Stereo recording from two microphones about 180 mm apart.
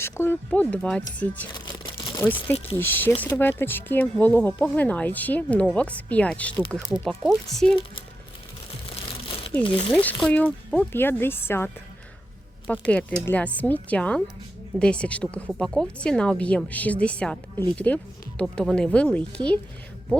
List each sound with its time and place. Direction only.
0.0 s a woman's voice: 15° left (ahead or behind)
1.5 s crumpling: 25° left (ahead or behind)
2.1 s a woman's voice: 10° left (ahead or behind)
9.0 s crumpling: 30° left (ahead or behind)
9.6 s speech: 30° left (ahead or behind)
9.9 s a woman's voice: 5° left (ahead or behind)
12.9 s a woman's voice: 10° left (ahead or behind)